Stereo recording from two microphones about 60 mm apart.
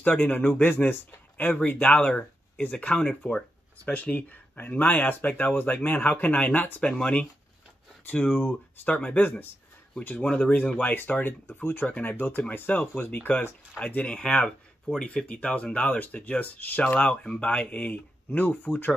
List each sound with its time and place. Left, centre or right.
0.0 s speech: left
13.7 s speech: left